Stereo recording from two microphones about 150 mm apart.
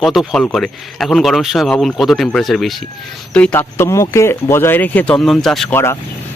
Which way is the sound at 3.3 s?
10° left (ahead or behind).